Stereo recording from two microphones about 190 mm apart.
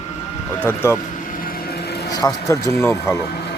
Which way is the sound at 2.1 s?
20° left (ahead or behind).